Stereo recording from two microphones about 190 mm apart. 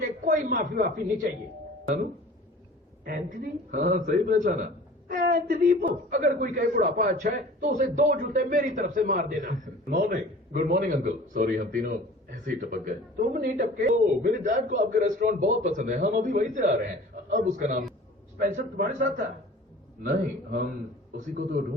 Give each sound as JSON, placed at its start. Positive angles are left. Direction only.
{"t": 0.0, "sound": "a woman's voice", "side_deg": -45}
{"t": 3.0, "sound": "a man's voice", "side_deg": -45}